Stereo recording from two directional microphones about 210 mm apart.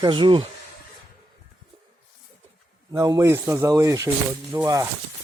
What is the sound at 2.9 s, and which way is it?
Speech, 15° right (ahead or behind).